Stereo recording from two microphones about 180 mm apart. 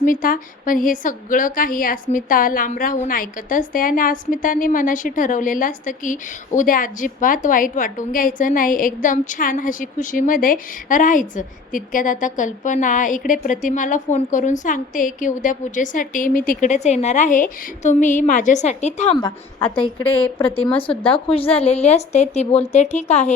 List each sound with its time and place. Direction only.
0.0 s a woman's voice: 50° left (ahead or behind)